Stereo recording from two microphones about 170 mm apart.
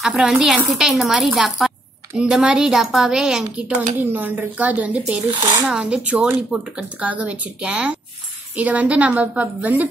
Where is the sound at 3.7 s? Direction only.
50° right (ahead or behind).